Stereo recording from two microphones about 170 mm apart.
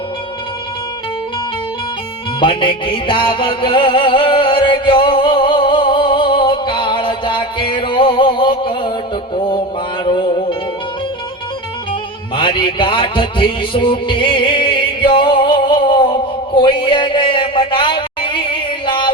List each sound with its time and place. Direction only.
2.4 s music: 30° left (ahead or behind)
12.4 s music: 30° left (ahead or behind)